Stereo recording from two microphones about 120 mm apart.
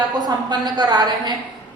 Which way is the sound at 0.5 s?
35° right (ahead or behind).